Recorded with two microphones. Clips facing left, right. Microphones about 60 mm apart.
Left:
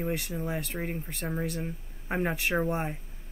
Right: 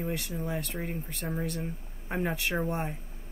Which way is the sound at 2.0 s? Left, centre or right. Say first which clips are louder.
Left 2 dB; left.